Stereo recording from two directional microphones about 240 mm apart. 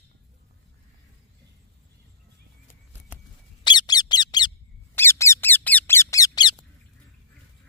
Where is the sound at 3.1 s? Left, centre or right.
Centre.